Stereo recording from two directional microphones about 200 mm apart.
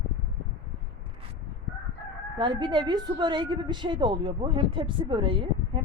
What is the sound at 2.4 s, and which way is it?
A woman's voice, 25° right (ahead or behind).